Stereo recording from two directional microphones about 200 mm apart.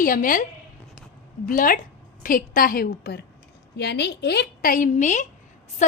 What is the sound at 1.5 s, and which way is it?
A woman's voice, 45° left (ahead or behind).